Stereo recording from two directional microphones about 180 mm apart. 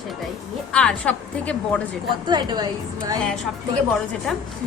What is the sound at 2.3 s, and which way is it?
Speech, 25° right (ahead or behind).